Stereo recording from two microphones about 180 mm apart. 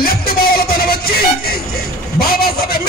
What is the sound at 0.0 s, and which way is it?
Music, 55° left (ahead or behind).